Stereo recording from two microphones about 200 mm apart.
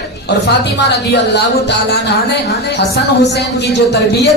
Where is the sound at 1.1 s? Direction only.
55° left (ahead or behind).